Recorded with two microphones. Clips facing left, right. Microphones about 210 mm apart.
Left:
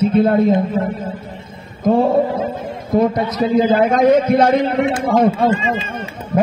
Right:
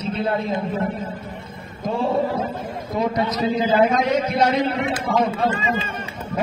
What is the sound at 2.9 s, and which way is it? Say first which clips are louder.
A man's voice: left 6 dB; 55° left (ahead or behind).